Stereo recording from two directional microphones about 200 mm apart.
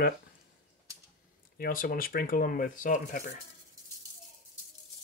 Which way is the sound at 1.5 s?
45° left (ahead or behind).